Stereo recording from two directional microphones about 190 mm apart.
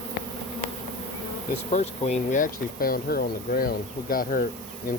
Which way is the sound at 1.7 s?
35° left (ahead or behind).